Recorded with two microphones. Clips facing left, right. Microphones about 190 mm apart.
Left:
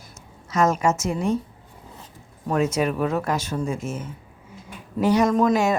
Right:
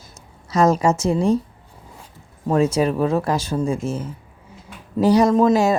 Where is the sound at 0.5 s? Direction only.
35° right (ahead or behind).